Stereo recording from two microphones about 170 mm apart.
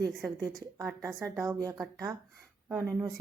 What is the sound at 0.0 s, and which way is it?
Speech, 20° right (ahead or behind).